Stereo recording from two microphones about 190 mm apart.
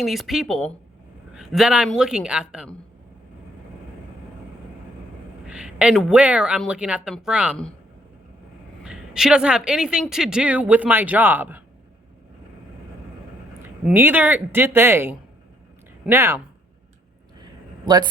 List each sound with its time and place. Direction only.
0.0 s speech: centre (ahead or behind)
5.5 s speech: 5° right (ahead or behind)
8.8 s speech: 5° right (ahead or behind)
13.8 s speech: 10° right (ahead or behind)
17.8 s speech: 20° right (ahead or behind)